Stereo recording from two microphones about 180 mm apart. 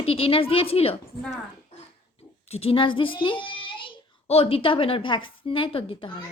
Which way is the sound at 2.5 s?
35° left (ahead or behind).